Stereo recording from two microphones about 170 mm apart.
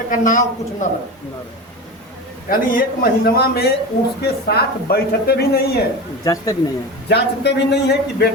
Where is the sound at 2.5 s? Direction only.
60° left (ahead or behind).